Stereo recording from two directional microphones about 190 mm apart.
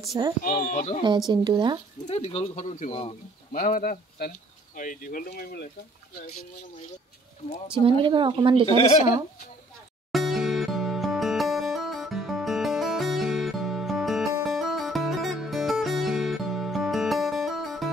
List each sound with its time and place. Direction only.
0.4 s speech: 50° left (ahead or behind)
1.3 s speech: 25° right (ahead or behind)
2.0 s speech: 35° left (ahead or behind)
3.5 s speech: 45° left (ahead or behind)
7.8 s speech: 25° right (ahead or behind)
10.1 s music: centre (ahead or behind)